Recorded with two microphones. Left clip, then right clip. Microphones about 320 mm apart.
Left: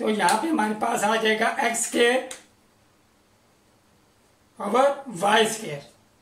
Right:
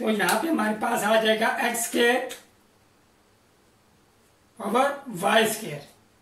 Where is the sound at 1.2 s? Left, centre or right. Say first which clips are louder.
Left 1 dB; left.